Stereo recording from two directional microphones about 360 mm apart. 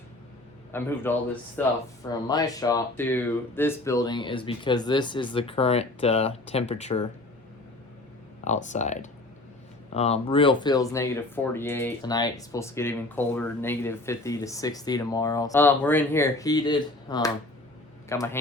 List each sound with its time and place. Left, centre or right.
0.7 s speech: centre
8.4 s speech: centre